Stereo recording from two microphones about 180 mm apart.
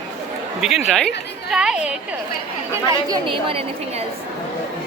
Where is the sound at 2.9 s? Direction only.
25° right (ahead or behind).